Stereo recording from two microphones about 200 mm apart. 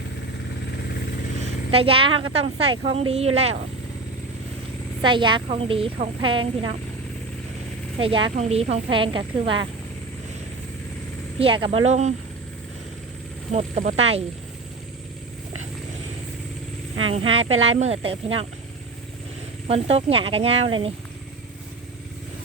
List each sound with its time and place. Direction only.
1.4 s a woman's voice: 30° right (ahead or behind)
5.0 s speech: 25° right (ahead or behind)
7.9 s speech: 25° right (ahead or behind)
11.3 s speech: 25° right (ahead or behind)
13.5 s speech: 35° right (ahead or behind)
17.0 s speech: 25° right (ahead or behind)
17.4 s speech: 90° right
17.7 s speech: 30° right (ahead or behind)
19.6 s speech: 30° right (ahead or behind)